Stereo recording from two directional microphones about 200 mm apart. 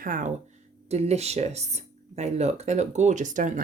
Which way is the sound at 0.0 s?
40° right (ahead or behind).